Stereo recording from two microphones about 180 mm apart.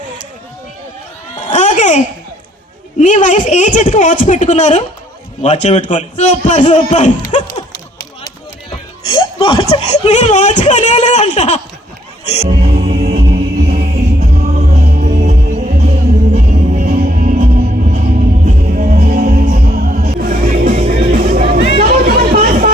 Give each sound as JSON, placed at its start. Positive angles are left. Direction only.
{"t": 1.5, "sound": "a sound", "side_deg": 45}
{"t": 3.0, "sound": "a woman's voice", "side_deg": 45}
{"t": 9.0, "sound": "speech", "side_deg": 30}
{"t": 12.2, "sound": "music", "side_deg": 35}
{"t": 12.5, "sound": "music", "side_deg": -40}